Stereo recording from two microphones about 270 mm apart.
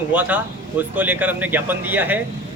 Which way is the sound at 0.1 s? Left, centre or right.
Centre.